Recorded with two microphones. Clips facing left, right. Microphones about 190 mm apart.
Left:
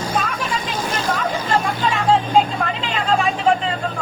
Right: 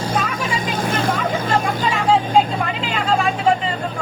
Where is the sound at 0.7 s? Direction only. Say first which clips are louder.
Right 3 dB; 55° right (ahead or behind).